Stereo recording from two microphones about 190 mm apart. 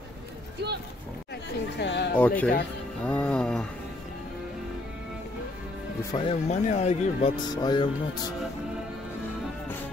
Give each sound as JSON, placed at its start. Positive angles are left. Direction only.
{"t": 1.8, "sound": "a sound", "side_deg": 60}
{"t": 2.1, "sound": "speech", "side_deg": 10}
{"t": 3.1, "sound": "music", "side_deg": 5}
{"t": 6.1, "sound": "speech", "side_deg": 30}
{"t": 7.5, "sound": "music", "side_deg": 20}